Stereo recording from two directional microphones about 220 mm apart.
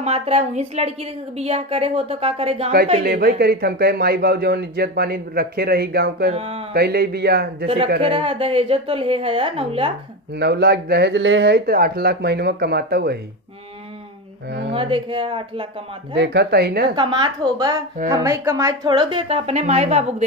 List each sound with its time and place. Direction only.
0.0 s a woman's voice: 25° right (ahead or behind)
3.0 s speech: 45° right (ahead or behind)
6.3 s a woman's voice: 30° right (ahead or behind)
6.7 s speech: 45° right (ahead or behind)
7.6 s a woman's voice: 25° right (ahead or behind)
10.3 s speech: 50° right (ahead or behind)
14.7 s a woman's voice: 25° right (ahead or behind)
16.2 s speech: 50° right (ahead or behind)
16.9 s a woman's voice: 20° right (ahead or behind)